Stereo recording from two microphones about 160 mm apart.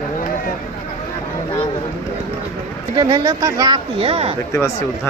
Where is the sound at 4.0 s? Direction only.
35° right (ahead or behind).